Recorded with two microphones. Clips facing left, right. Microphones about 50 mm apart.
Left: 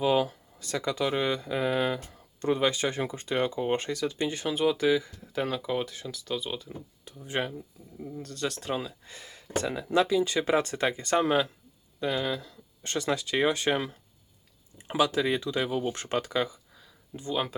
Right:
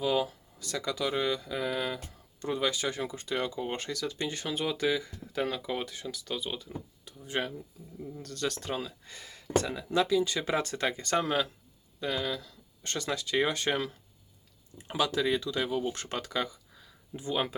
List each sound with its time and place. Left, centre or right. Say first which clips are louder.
0.0 s speech: left 4 dB; left
2.0 s speech: left 6 dB; left
4.3 s speech: left 8 dB; centre
7.0 s speech: left 2 dB; left
8.2 s speech: left 1 dB; centre
8.7 s speech: left 3 dB; centre
14.8 s speech: left 4 dB; centre
17.2 s speech: left 1 dB; centre